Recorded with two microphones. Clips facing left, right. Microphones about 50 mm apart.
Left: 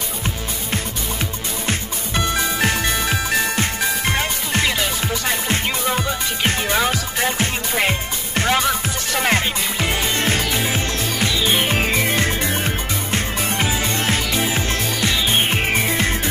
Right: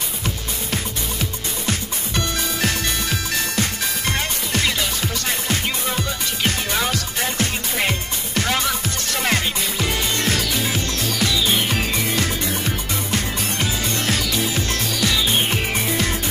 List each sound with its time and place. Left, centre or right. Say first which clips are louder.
2.1 s music: left 4 dB; left
5.9 s music: left 3 dB; left